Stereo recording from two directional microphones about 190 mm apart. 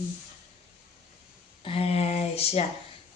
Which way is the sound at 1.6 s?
30° left (ahead or behind).